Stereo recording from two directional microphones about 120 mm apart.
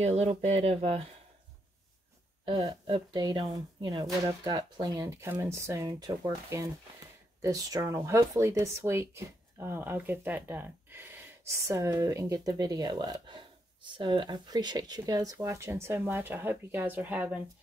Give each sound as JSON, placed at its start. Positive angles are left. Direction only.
{"t": 0.0, "sound": "speech", "side_deg": -60}
{"t": 2.4, "sound": "speech", "side_deg": -50}
{"t": 3.1, "sound": "speech", "side_deg": -35}